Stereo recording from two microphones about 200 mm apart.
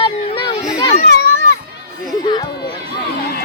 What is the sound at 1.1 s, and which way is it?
Children playing, 55° left (ahead or behind).